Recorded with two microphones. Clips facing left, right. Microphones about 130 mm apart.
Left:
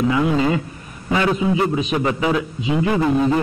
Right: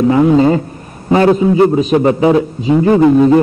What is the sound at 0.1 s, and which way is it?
A man's voice, 40° right (ahead or behind).